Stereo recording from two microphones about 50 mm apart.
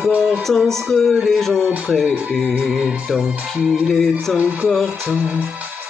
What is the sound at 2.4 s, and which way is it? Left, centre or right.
Music, right.